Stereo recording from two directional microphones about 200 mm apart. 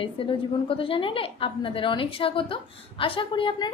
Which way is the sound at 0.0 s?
25° left (ahead or behind).